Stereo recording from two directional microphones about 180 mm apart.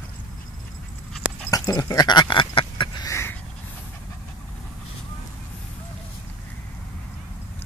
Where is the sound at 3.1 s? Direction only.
15° left (ahead or behind).